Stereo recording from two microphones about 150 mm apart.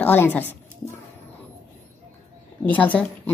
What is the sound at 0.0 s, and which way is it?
Speech, 10° left (ahead or behind).